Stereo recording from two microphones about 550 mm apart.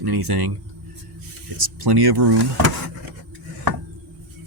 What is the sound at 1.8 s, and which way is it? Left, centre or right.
Speech, right.